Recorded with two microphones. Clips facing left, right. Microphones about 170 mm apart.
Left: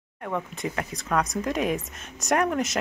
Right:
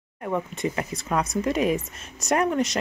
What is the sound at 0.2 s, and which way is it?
Speech, 5° right (ahead or behind).